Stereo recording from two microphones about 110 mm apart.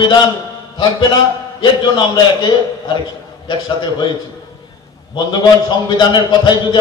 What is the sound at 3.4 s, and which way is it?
Speech, 45° left (ahead or behind).